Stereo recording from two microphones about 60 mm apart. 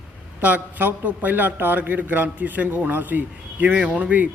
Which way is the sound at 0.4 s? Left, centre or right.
Right.